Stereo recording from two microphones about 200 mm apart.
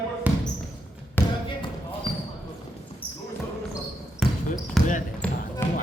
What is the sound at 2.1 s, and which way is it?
Basketball bounce, 25° left (ahead or behind).